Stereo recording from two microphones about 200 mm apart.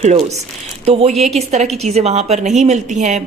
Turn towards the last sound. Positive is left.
turn(degrees=-35)  # may be behind; listen again after turning